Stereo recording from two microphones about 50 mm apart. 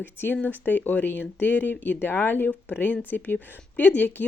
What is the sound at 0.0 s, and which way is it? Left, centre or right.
Speech, left.